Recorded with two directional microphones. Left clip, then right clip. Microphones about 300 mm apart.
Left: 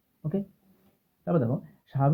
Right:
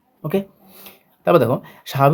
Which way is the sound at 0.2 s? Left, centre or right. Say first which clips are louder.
Right 12 dB; right.